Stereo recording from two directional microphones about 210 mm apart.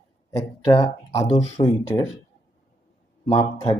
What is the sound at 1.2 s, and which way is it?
Speech, 35° left (ahead or behind).